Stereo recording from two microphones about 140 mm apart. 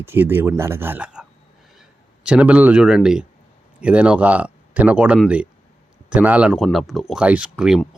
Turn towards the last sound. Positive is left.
turn(degrees=-5)  # may be behind; listen again after turning